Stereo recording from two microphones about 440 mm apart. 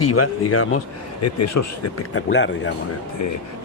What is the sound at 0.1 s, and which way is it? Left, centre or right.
A man's voice, left.